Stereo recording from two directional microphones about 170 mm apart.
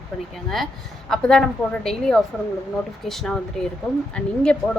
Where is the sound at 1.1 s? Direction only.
5° left (ahead or behind).